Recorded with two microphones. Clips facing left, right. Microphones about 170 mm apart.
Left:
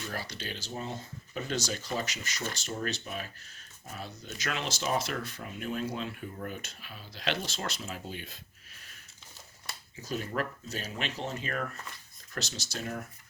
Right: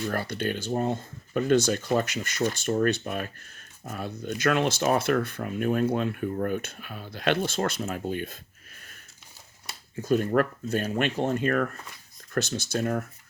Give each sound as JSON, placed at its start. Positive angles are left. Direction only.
{"t": 0.1, "sound": "speech", "side_deg": -55}
{"t": 9.9, "sound": "speech", "side_deg": -55}